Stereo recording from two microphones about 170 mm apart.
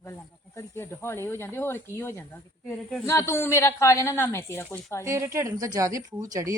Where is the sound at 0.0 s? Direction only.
15° left (ahead or behind).